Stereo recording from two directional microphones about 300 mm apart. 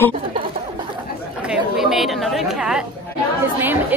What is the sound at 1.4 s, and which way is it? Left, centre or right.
Speech, centre.